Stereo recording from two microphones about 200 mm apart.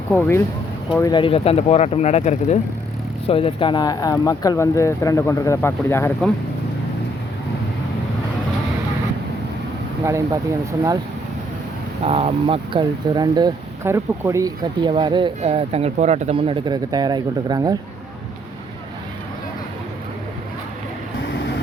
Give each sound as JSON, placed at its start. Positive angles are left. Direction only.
{"t": 0.1, "sound": "speech", "side_deg": 10}
{"t": 10.1, "sound": "speech", "side_deg": -15}
{"t": 12.0, "sound": "speech", "side_deg": -30}